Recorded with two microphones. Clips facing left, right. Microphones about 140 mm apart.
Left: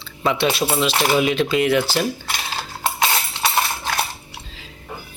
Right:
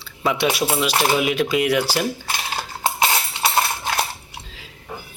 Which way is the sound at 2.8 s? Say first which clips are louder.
Right 1 dB; 10° right (ahead or behind).